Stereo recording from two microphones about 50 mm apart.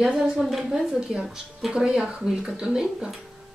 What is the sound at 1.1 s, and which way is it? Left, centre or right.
Speech, centre.